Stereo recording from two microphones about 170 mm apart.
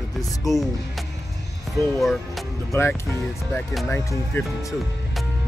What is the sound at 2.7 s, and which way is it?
Speech, 15° left (ahead or behind).